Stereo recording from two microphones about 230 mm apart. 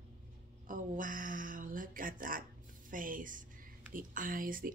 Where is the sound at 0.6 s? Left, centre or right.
Right.